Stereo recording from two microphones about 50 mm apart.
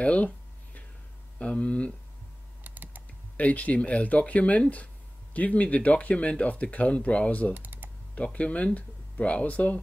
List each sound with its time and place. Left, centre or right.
0.0 s speech: left
1.4 s speech: left
2.6 s typing: right
3.3 s speech: left
7.5 s computer keyboard: right
8.1 s speech: left